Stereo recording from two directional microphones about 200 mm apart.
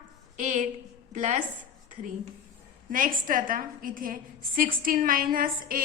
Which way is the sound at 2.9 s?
45° right (ahead or behind).